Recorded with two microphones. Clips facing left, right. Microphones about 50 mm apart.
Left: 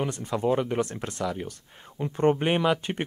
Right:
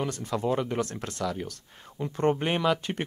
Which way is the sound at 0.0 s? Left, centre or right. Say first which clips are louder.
Left 2 dB; centre.